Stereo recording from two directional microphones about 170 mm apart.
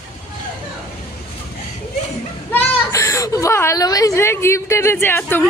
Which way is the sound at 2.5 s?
15° left (ahead or behind).